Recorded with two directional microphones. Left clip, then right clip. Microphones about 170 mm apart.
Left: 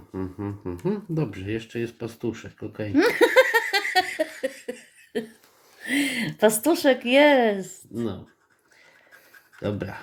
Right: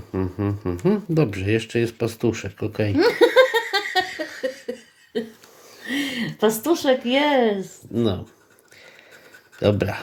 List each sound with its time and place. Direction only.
0.1 s speech: 35° right (ahead or behind)
2.9 s laughter: 40° left (ahead or behind)
5.8 s speech: 35° left (ahead or behind)
7.9 s speech: 35° right (ahead or behind)
9.6 s speech: 35° right (ahead or behind)